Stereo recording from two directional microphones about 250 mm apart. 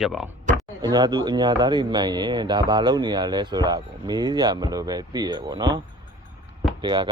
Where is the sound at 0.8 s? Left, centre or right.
Centre.